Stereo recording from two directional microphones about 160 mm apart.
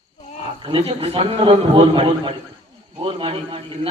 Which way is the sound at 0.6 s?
35° right (ahead or behind).